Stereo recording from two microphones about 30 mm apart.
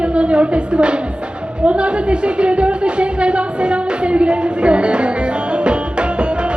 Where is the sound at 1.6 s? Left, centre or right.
Right.